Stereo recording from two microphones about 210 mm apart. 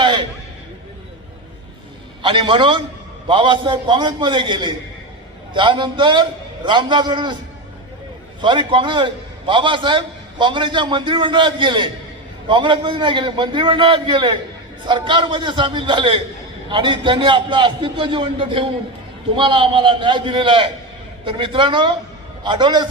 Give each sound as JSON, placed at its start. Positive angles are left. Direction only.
{"t": 0.0, "sound": "a sound", "side_deg": -20}
{"t": 2.2, "sound": "a man's voice", "side_deg": -25}
{"t": 8.4, "sound": "a man's voice", "side_deg": -20}